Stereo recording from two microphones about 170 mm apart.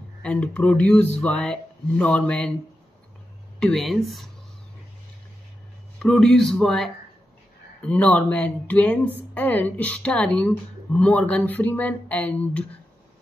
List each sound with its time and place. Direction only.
0.2 s speech: 5° left (ahead or behind)
3.5 s speech: centre (ahead or behind)
6.0 s speech: 5° left (ahead or behind)